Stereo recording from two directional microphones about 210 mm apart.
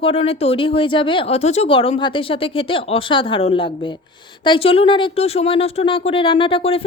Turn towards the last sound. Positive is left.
turn(degrees=25)  # may be behind; listen again after turning